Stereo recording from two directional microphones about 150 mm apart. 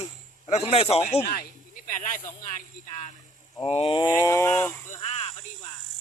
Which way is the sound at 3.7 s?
40° left (ahead or behind).